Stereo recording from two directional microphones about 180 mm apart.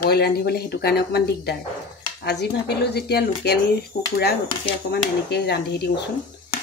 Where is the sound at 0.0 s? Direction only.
60° left (ahead or behind).